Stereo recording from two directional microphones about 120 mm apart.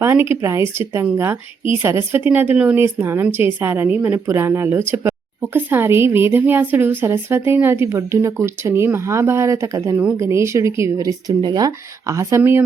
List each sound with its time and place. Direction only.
0.0 s a woman's voice: 20° right (ahead or behind)